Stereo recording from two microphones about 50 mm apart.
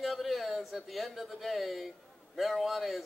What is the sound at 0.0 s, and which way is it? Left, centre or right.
A man's voice, centre.